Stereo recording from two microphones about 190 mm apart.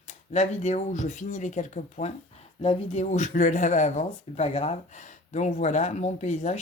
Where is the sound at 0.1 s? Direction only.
35° left (ahead or behind).